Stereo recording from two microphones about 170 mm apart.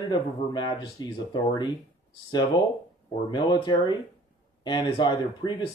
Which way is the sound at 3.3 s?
25° left (ahead or behind).